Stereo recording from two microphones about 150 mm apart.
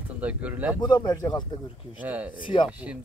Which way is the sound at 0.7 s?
30° left (ahead or behind).